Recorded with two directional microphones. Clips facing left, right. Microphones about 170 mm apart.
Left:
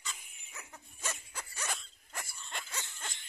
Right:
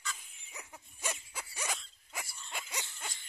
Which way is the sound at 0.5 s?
15° right (ahead or behind).